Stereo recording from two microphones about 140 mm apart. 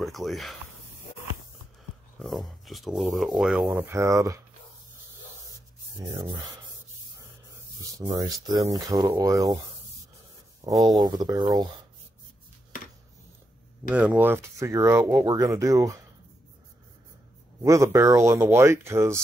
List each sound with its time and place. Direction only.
0.0 s speech: centre (ahead or behind)
2.1 s speech: centre (ahead or behind)
3.8 s speech: 20° right (ahead or behind)
8.1 s speech: 25° right (ahead or behind)
10.6 s speech: 20° right (ahead or behind)
11.1 s speech: 30° right (ahead or behind)
13.8 s speech: 10° right (ahead or behind)
17.6 s speech: 20° right (ahead or behind)